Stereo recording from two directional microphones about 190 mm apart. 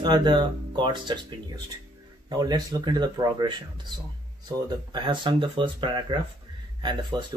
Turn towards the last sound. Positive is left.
turn(degrees=-25)  # may be behind; listen again after turning